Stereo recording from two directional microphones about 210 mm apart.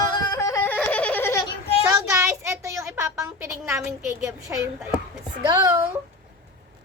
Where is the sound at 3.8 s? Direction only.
10° right (ahead or behind).